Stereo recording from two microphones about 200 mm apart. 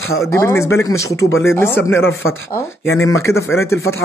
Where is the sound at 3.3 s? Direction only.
90° left.